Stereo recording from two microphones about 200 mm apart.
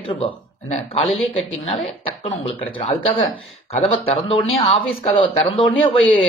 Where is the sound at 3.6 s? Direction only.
30° left (ahead or behind).